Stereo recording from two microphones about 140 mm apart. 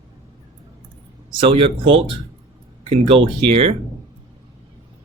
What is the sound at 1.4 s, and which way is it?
Speech, 40° right (ahead or behind).